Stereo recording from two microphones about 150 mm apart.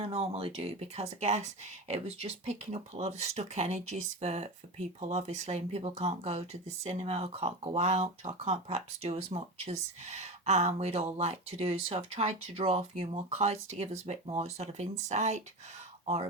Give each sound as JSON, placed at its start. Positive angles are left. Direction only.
{"t": 0.0, "sound": "speech", "side_deg": -40}